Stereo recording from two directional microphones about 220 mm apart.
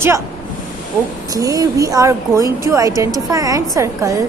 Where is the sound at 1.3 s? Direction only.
15° right (ahead or behind).